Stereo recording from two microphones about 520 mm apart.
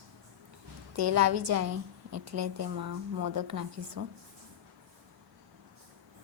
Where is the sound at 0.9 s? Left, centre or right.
Right.